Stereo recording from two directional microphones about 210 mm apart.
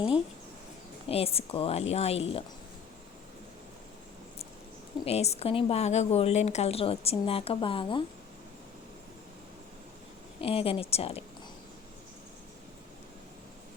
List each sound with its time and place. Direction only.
1.0 s a woman's voice: 30° left (ahead or behind)
5.0 s a woman's voice: 30° left (ahead or behind)
10.4 s a woman's voice: 25° left (ahead or behind)